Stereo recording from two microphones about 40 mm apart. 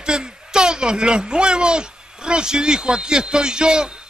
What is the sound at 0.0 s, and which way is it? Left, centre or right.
A man's voice, right.